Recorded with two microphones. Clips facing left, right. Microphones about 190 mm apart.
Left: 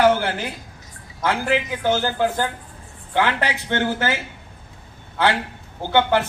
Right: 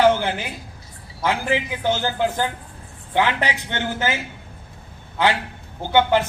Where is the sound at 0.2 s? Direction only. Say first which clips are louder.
Even; 15° right (ahead or behind).